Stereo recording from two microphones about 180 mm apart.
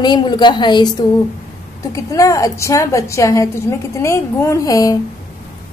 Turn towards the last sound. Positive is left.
turn(degrees=20)  # may be behind; listen again after turning